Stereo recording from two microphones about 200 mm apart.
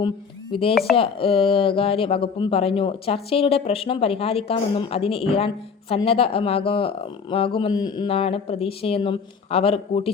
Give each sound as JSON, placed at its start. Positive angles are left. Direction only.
{"t": 0.7, "sound": "speech", "side_deg": 50}
{"t": 0.9, "sound": "speech", "side_deg": 25}